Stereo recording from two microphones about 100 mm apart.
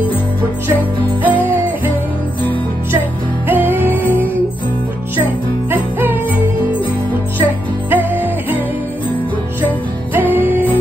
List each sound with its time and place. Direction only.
1.2 s jingle bell: 20° right (ahead or behind)
3.4 s music: 20° right (ahead or behind)
5.1 s jingle bell: 20° right (ahead or behind)
7.9 s jingle bell: 20° right (ahead or behind)
10.1 s music: 20° right (ahead or behind)